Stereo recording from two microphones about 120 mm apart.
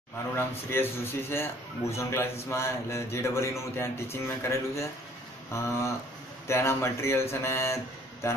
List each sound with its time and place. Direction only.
0.7 s a man's voice: 20° left (ahead or behind)